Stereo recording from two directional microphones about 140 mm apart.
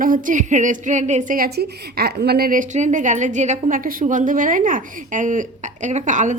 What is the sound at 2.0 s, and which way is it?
A woman's voice, 85° right.